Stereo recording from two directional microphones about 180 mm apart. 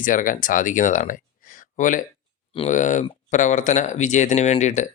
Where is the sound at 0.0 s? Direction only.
45° left (ahead or behind).